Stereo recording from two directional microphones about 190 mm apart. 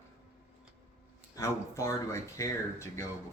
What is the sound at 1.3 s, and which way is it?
Speech, 15° left (ahead or behind).